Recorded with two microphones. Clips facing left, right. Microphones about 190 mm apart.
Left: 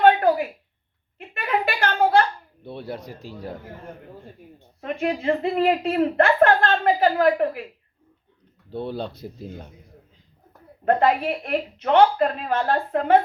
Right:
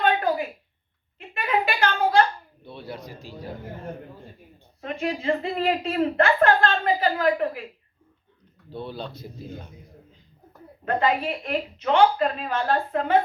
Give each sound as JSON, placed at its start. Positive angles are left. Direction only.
{"t": 0.0, "sound": "a sound", "side_deg": 60}
{"t": 2.6, "sound": "a woman's voice", "side_deg": 55}
{"t": 4.8, "sound": "a woman's voice", "side_deg": 60}
{"t": 8.7, "sound": "a woman's voice", "side_deg": 60}
{"t": 10.8, "sound": "a woman's voice", "side_deg": 60}